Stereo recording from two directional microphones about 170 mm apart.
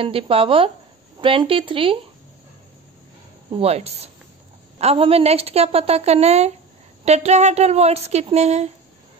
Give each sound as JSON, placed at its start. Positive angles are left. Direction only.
{"t": 0.0, "sound": "a woman's voice", "side_deg": -35}
{"t": 3.5, "sound": "a woman's voice", "side_deg": -35}